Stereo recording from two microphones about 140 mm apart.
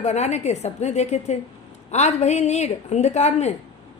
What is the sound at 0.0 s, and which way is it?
A woman's voice, 55° left (ahead or behind).